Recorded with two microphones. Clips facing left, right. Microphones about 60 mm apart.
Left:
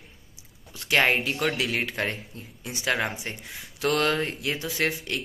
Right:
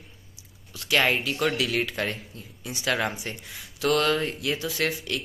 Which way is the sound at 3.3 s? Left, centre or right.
Left.